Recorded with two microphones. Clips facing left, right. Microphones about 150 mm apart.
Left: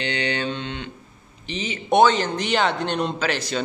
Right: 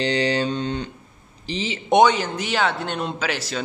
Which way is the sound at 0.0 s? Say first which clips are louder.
Right 4 dB; 35° right (ahead or behind).